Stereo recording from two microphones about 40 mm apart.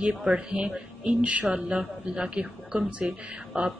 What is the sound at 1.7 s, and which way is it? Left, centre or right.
A woman's voice, right.